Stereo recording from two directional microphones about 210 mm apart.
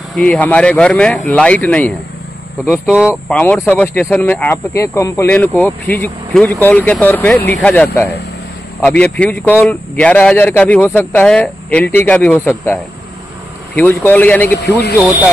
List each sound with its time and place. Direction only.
0.1 s speech: 5° left (ahead or behind)
2.9 s speech: 5° right (ahead or behind)
13.7 s speech: 10° left (ahead or behind)
14.6 s speech: 50° left (ahead or behind)
15.0 s speech: centre (ahead or behind)